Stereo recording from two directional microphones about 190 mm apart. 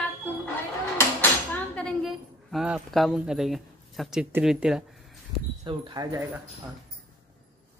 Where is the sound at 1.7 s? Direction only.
5° left (ahead or behind).